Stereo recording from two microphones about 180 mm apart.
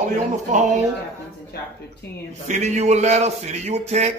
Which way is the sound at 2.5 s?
40° right (ahead or behind).